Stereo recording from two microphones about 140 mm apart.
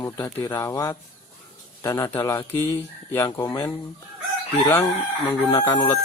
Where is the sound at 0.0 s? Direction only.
20° left (ahead or behind).